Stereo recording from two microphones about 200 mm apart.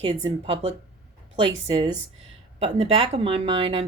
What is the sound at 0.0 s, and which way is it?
Speech, 25° right (ahead or behind).